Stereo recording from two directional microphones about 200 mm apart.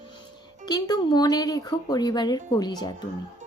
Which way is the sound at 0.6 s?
20° left (ahead or behind).